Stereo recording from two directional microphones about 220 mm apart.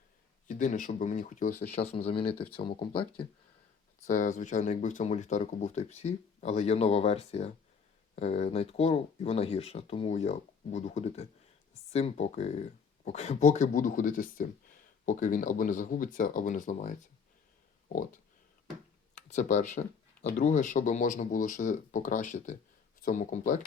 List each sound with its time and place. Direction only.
0.4 s speech: 35° left (ahead or behind)
4.0 s speech: 35° left (ahead or behind)
17.8 s pig: 35° left (ahead or behind)
19.1 s speech: 30° left (ahead or behind)